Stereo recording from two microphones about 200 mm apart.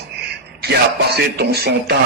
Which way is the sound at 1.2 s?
50° right (ahead or behind).